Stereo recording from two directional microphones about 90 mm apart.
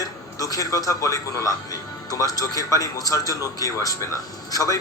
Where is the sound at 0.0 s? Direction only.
40° left (ahead or behind).